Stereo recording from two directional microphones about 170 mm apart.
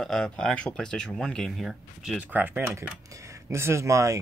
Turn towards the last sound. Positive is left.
turn(degrees=-20)  # may be behind; listen again after turning